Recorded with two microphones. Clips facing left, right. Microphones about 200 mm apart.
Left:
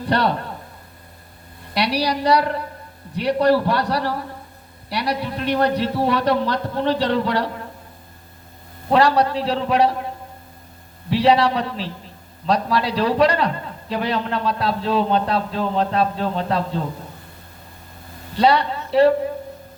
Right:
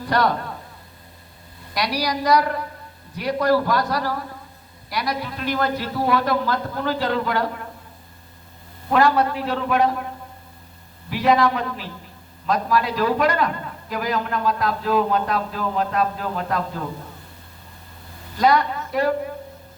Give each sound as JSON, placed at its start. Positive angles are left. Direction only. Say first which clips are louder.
{"t": 0.0, "sound": "a man's voice", "louder": "left 1 dB", "side_deg": 30}
{"t": 2.0, "sound": "a man's voice", "louder": "even", "side_deg": 30}
{"t": 8.9, "sound": "a man's voice", "louder": "left 2 dB", "side_deg": 35}
{"t": 11.1, "sound": "a man's voice", "louder": "left 2 dB", "side_deg": 30}
{"t": 18.3, "sound": "a woman's voice", "louder": "left 1 dB", "side_deg": 30}